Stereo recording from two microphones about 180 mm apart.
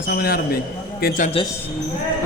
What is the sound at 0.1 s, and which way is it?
A man's voice, 60° left (ahead or behind).